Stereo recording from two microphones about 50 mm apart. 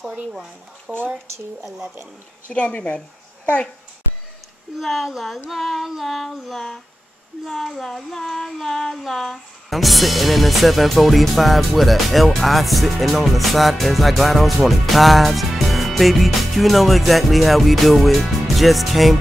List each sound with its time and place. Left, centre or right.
0.0 s speech: centre
2.5 s a woman's voice: left
4.7 s music: centre